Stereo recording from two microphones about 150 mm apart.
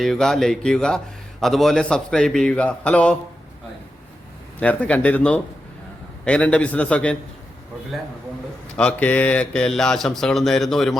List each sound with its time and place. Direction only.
0.0 s a man's voice: centre (ahead or behind)
4.6 s a man's voice: 10° left (ahead or behind)
8.7 s a man's voice: 10° left (ahead or behind)